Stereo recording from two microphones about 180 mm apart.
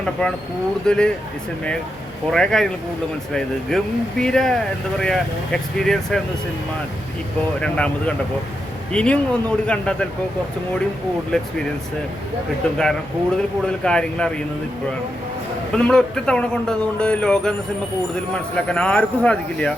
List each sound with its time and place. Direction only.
0.0 s speech: 5° left (ahead or behind)
2.3 s speech: 5° left (ahead or behind)
7.6 s speech: 5° left (ahead or behind)
12.7 s speech: 5° left (ahead or behind)
15.7 s speech: 5° left (ahead or behind)
18.5 s speech: 5° left (ahead or behind)